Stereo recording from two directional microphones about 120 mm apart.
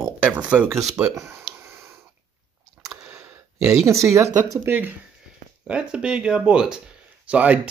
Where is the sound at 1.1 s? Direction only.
25° right (ahead or behind).